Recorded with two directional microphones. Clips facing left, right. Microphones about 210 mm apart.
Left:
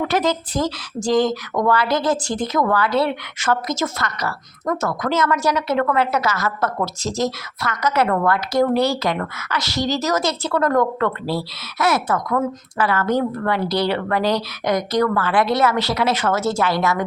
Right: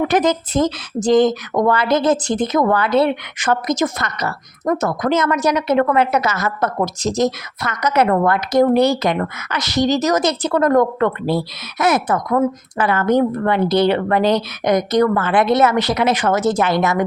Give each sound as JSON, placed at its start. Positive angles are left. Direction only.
{"t": 0.0, "sound": "speech", "side_deg": -20}